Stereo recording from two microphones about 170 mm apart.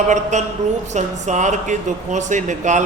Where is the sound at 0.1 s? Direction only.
45° right (ahead or behind).